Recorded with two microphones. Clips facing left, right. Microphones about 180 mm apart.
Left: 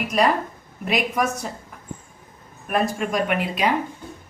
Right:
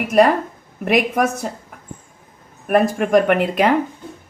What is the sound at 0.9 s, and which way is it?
Speech, 55° right (ahead or behind).